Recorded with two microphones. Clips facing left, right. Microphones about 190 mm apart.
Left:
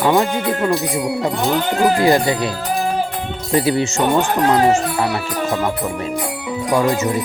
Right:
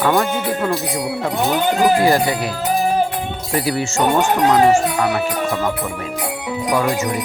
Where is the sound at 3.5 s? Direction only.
25° left (ahead or behind).